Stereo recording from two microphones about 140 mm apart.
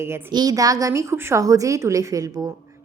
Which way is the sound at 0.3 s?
25° right (ahead or behind).